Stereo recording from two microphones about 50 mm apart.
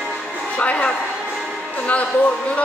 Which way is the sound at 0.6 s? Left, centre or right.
Left.